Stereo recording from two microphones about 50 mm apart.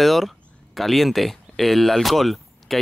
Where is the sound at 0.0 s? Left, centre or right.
Centre.